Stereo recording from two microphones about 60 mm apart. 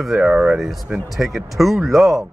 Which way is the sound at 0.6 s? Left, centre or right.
Centre.